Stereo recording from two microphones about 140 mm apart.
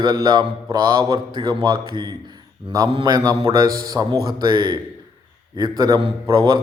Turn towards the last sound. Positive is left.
turn(degrees=-30)  # may be behind; listen again after turning